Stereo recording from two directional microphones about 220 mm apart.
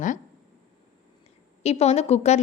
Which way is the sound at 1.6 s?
30° left (ahead or behind).